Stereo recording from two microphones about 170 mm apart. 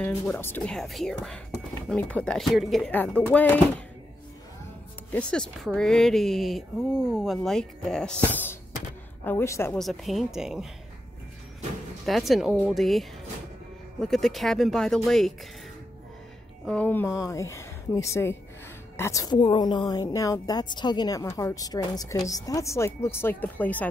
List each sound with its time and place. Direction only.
0.0 s speech: 10° left (ahead or behind)
5.1 s speech: 5° left (ahead or behind)
9.8 s speech: centre (ahead or behind)
12.1 s speech: centre (ahead or behind)
16.6 s a woman's voice: 10° left (ahead or behind)